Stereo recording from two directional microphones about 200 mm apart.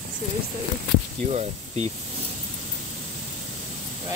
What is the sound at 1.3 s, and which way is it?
Speech, 35° right (ahead or behind).